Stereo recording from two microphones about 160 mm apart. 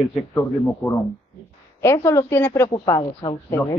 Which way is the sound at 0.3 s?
10° left (ahead or behind).